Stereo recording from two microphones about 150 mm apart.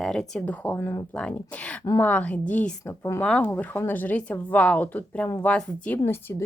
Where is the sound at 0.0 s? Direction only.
5° left (ahead or behind).